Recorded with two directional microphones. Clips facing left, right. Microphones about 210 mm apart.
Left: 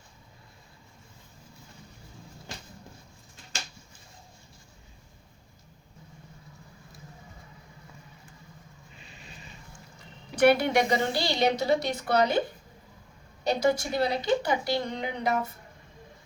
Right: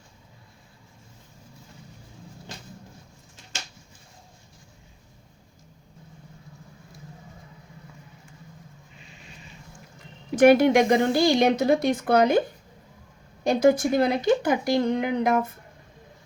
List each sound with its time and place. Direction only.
10.3 s a woman's voice: 50° right (ahead or behind)
13.4 s a woman's voice: 50° right (ahead or behind)